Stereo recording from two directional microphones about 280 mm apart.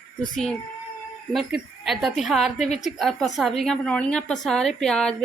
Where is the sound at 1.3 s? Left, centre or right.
Centre.